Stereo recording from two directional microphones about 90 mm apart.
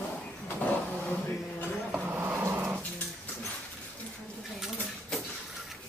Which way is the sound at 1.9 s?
20° right (ahead or behind).